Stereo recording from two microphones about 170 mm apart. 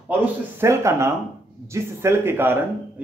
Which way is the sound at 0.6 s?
15° right (ahead or behind).